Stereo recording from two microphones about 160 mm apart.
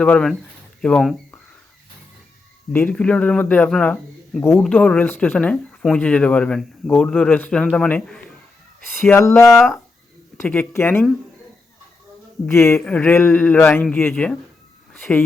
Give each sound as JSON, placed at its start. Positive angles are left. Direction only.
{"t": 0.0, "sound": "speech", "side_deg": 5}
{"t": 2.7, "sound": "speech", "side_deg": 10}
{"t": 9.6, "sound": "speech", "side_deg": 0}
{"t": 10.3, "sound": "speech", "side_deg": 10}
{"t": 12.5, "sound": "speech", "side_deg": 15}